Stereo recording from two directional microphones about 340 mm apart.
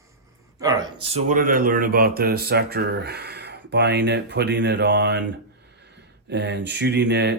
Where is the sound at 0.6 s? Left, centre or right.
Centre; by 5.2 s right.